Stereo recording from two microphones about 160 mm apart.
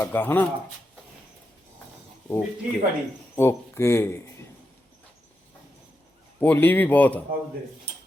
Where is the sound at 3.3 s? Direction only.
15° left (ahead or behind).